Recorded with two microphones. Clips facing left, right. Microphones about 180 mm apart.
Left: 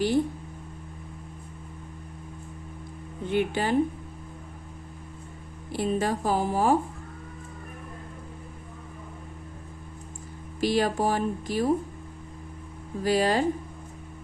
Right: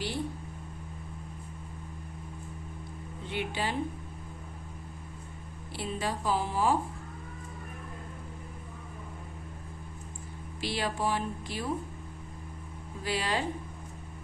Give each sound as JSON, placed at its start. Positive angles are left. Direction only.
{"t": 3.2, "sound": "speech", "side_deg": 50}
{"t": 5.7, "sound": "speech", "side_deg": 45}
{"t": 10.6, "sound": "speech", "side_deg": 45}
{"t": 13.0, "sound": "speech", "side_deg": 45}